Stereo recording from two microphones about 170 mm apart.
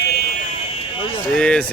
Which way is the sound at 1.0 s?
30° left (ahead or behind).